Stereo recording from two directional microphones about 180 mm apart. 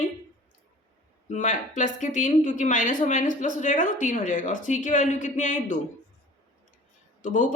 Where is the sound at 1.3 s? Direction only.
45° left (ahead or behind).